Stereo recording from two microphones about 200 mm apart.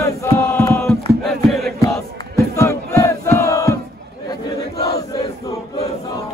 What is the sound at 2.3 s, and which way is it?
Battle cry, 15° left (ahead or behind).